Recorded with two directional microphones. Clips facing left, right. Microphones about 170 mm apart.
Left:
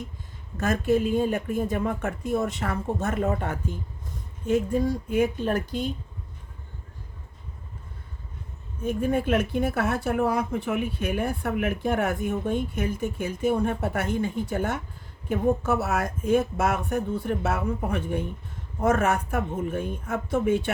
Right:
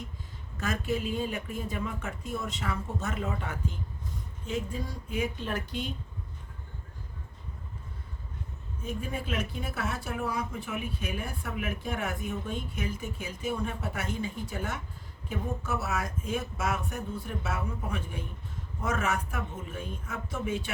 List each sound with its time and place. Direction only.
0.5 s speech: 45° left (ahead or behind)
8.8 s speech: 55° left (ahead or behind)